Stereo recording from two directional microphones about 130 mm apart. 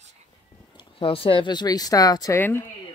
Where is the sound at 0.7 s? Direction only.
45° left (ahead or behind); by 2.4 s 30° left (ahead or behind).